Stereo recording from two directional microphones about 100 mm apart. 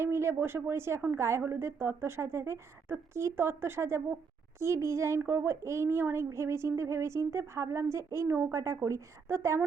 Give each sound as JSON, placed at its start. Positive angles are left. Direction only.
{"t": 0.0, "sound": "a child's voice", "side_deg": -25}